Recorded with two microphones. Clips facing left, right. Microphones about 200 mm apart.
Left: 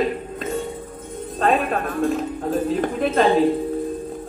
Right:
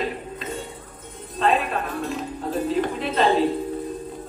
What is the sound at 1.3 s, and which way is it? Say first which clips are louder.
Music: left 2 dB; 50° left (ahead or behind).